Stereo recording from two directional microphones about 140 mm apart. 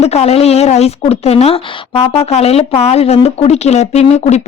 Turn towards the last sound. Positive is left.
turn(degrees=50)  # may be behind; listen again after turning